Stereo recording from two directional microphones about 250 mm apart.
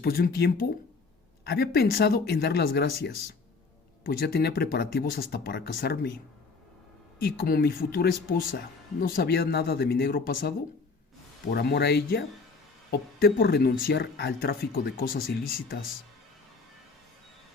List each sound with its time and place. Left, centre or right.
0.0 s speech: left
7.2 s speech: left
11.5 s speech: left